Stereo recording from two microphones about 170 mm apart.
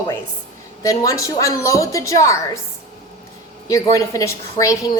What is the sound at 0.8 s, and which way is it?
A woman's voice, 20° left (ahead or behind).